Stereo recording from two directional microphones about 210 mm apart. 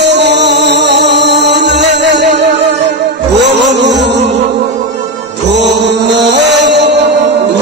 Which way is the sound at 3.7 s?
55° right (ahead or behind).